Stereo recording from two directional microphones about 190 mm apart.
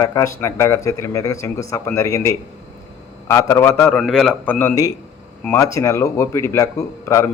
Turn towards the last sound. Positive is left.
turn(degrees=15)  # may be behind; listen again after turning